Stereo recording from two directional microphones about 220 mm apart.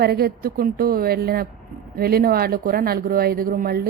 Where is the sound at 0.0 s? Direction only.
45° right (ahead or behind).